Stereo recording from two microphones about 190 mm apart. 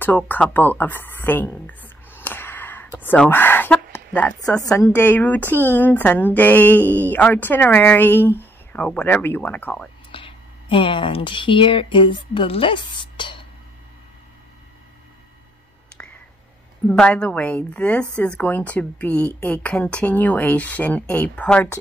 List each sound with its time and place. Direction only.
0.0 s a sound: 10° left (ahead or behind)
4.7 s speech: 10° left (ahead or behind)
10.1 s speech: 25° left (ahead or behind)
16.8 s speech: 5° left (ahead or behind)